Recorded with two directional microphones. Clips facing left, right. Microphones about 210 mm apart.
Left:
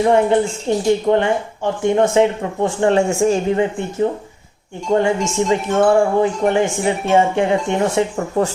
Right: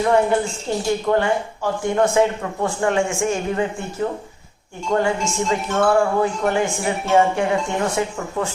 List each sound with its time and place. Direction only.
0.0 s speech: 20° left (ahead or behind)
3.5 s speech: 20° left (ahead or behind)
4.9 s speech: 20° left (ahead or behind)